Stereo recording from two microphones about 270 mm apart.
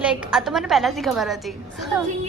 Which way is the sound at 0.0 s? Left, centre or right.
Centre.